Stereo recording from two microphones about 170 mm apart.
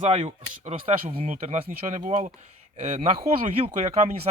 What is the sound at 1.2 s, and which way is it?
Speech, 50° right (ahead or behind).